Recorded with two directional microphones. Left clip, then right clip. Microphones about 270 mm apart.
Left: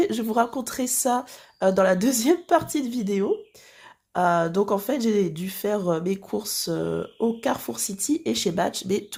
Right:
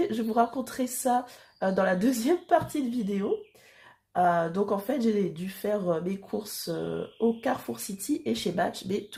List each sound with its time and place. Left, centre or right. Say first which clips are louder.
0.0 s speech: left 3 dB; left